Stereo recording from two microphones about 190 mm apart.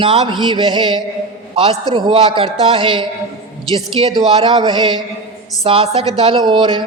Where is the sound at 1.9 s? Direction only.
25° right (ahead or behind).